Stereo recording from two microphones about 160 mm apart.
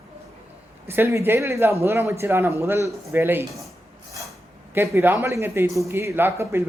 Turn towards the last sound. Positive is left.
turn(degrees=-15)  # may be behind; listen again after turning